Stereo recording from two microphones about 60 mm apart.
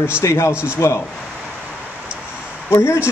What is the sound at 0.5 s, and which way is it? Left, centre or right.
Speech, centre.